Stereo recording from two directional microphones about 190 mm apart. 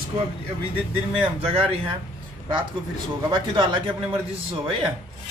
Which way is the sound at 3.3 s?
25° right (ahead or behind).